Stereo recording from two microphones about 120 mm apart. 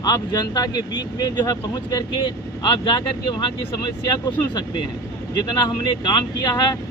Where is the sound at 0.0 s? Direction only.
35° left (ahead or behind).